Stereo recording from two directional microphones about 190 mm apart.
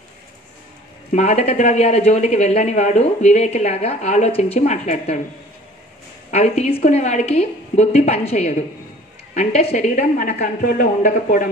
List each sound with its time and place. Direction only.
1.1 s speech: 35° left (ahead or behind)
6.3 s speech: 35° left (ahead or behind)